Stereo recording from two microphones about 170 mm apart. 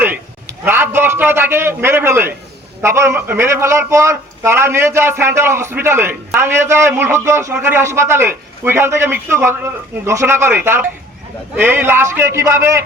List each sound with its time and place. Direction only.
0.6 s a man's voice: 10° right (ahead or behind)